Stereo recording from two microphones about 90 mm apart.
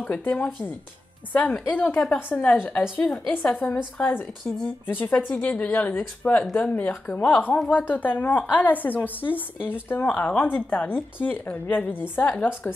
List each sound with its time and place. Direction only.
0.0 s a woman's voice: 15° left (ahead or behind)